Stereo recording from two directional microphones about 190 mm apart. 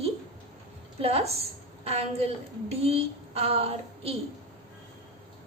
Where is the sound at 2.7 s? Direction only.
30° right (ahead or behind).